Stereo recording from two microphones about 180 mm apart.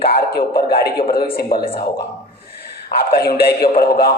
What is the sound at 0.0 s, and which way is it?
A man's voice, 60° left (ahead or behind).